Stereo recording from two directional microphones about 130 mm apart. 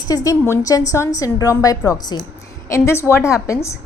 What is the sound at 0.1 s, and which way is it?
A woman's voice, 25° left (ahead or behind).